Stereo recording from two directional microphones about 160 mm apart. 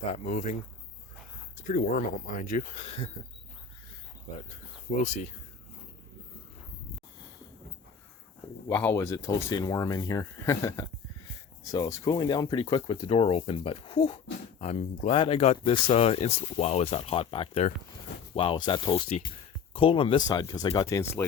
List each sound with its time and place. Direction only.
0.1 s speech: 45° left (ahead or behind)
1.6 s speech: 55° left (ahead or behind); by 3.1 s 40° left (ahead or behind)
5.0 s speech: 50° left (ahead or behind)
8.7 s speech: 15° left (ahead or behind); by 15.1 s 45° left (ahead or behind)
15.1 s speech: 35° left (ahead or behind)